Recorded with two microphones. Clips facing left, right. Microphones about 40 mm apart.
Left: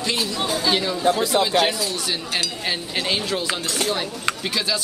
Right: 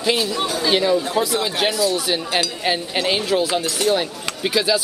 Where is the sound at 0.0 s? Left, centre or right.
Centre.